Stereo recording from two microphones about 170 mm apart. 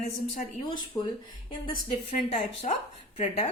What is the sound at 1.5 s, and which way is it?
A woman's voice, 35° left (ahead or behind).